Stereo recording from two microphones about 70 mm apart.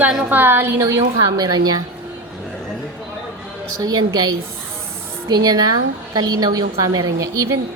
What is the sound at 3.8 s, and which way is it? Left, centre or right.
A woman's voice, right.